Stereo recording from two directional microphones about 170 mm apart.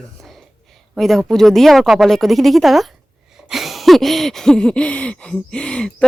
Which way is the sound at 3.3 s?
Centre (ahead or behind).